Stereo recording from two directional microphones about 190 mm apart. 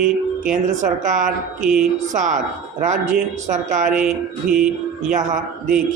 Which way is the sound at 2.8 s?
40° right (ahead or behind).